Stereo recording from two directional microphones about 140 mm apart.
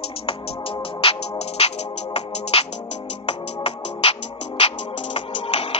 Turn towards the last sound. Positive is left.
turn(degrees=45)  # may be behind; listen again after turning